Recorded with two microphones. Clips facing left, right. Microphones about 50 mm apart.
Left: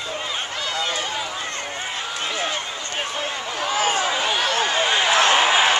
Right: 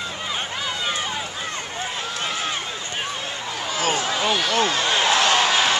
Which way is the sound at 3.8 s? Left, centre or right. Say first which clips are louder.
Left 1 dB; left.